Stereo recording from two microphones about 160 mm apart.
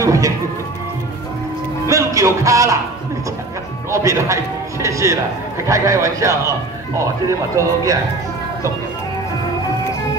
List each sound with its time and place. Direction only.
0.0 s music: 20° right (ahead or behind)
1.9 s music: 20° right (ahead or behind)
3.9 s a man's voice: 20° right (ahead or behind)